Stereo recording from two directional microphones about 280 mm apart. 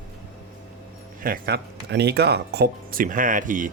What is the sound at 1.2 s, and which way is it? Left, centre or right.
Speech, right.